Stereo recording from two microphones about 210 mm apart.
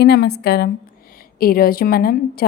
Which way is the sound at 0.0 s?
50° left (ahead or behind).